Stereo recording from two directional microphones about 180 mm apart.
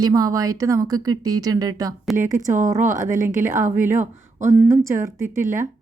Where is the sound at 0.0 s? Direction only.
20° right (ahead or behind).